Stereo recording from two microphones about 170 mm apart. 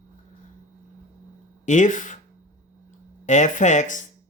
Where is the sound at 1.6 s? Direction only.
45° left (ahead or behind).